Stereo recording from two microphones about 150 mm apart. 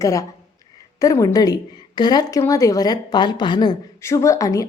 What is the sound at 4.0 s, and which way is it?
Speech, 20° left (ahead or behind).